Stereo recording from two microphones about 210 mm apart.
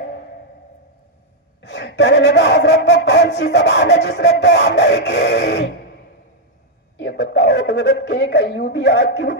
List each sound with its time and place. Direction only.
1.6 s speech: 55° left (ahead or behind)
7.0 s speech: 55° left (ahead or behind)